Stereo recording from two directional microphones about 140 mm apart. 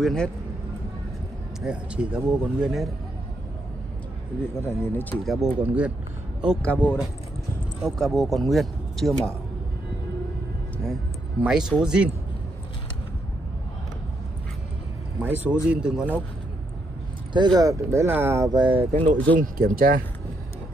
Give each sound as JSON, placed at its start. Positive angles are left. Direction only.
{"t": 0.0, "sound": "speech", "side_deg": 5}
{"t": 1.6, "sound": "speech", "side_deg": -5}
{"t": 4.6, "sound": "speech", "side_deg": 15}
{"t": 5.2, "sound": "speech", "side_deg": 0}
{"t": 5.6, "sound": "speech", "side_deg": -10}
{"t": 6.6, "sound": "speech", "side_deg": 10}
{"t": 11.4, "sound": "speech", "side_deg": -5}
{"t": 15.1, "sound": "speech", "side_deg": -10}
{"t": 17.3, "sound": "speech", "side_deg": -30}
{"t": 19.4, "sound": "speech", "side_deg": -90}